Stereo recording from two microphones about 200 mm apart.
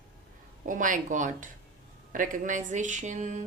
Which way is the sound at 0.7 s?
40° right (ahead or behind).